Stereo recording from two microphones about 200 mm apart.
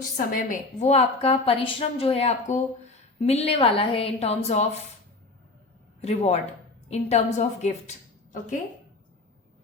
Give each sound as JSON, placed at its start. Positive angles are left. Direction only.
{"t": 0.0, "sound": "a woman's voice", "side_deg": 45}
{"t": 6.0, "sound": "a woman's voice", "side_deg": 30}